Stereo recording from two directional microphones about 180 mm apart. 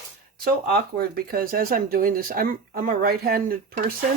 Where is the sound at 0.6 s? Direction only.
55° right (ahead or behind).